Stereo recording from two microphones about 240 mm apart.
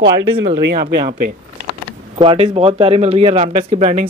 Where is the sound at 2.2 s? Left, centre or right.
Right.